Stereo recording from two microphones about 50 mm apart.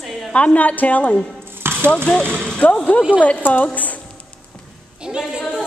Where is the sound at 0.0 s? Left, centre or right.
Centre.